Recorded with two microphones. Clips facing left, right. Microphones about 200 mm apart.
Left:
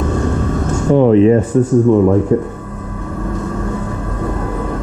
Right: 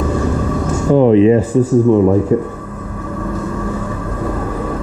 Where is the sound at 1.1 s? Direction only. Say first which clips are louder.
Even; 20° right (ahead or behind).